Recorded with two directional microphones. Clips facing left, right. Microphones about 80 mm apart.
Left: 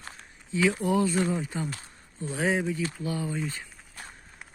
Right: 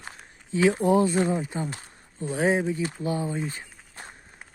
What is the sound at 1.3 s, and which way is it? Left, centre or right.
Speech, centre.